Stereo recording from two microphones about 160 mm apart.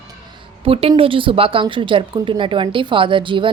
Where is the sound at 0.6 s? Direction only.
35° right (ahead or behind).